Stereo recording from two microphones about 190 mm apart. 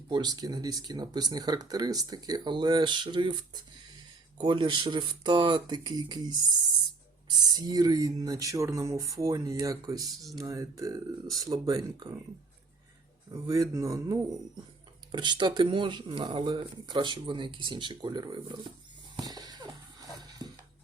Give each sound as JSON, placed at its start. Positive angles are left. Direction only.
{"t": 0.1, "sound": "speech", "side_deg": -20}
{"t": 13.3, "sound": "speech", "side_deg": -20}
{"t": 19.1, "sound": "a sound", "side_deg": -20}